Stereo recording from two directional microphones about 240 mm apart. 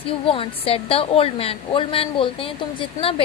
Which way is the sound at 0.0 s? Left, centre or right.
Left.